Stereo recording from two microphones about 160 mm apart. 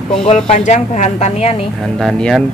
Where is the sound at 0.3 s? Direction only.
45° left (ahead or behind).